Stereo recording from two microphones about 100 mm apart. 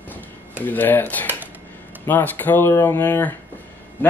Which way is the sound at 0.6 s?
20° left (ahead or behind).